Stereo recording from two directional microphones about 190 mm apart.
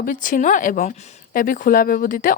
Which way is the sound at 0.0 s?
45° left (ahead or behind).